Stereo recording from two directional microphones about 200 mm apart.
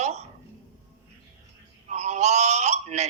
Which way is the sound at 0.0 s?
35° right (ahead or behind).